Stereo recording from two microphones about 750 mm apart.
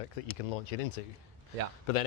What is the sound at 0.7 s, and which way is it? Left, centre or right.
Speech, left.